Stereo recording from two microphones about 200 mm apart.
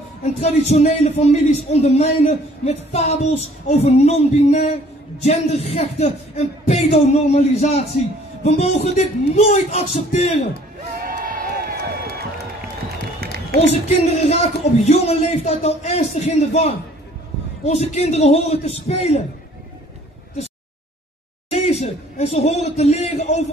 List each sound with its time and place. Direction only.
0.2 s a man's voice: 35° left (ahead or behind)
11.1 s crowd: 45° right (ahead or behind)
13.6 s a man's voice: 30° left (ahead or behind)
21.5 s a man's voice: 30° left (ahead or behind)